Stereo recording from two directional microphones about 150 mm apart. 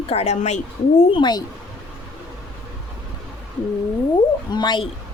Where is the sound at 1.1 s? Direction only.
30° left (ahead or behind).